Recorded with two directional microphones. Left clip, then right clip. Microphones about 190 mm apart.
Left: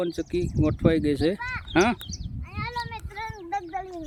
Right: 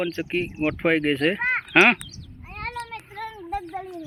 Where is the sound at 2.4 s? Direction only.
40° right (ahead or behind).